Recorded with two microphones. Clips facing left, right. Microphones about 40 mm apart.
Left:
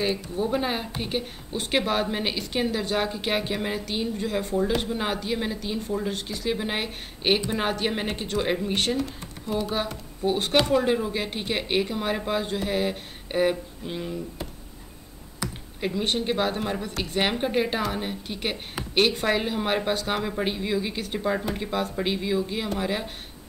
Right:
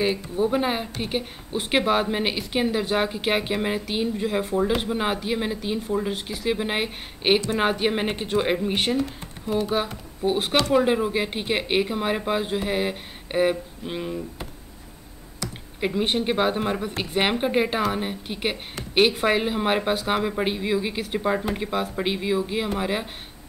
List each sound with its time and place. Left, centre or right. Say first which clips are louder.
0.0 s a woman's voice: right 3 dB; centre
15.8 s a woman's voice: right 3 dB; centre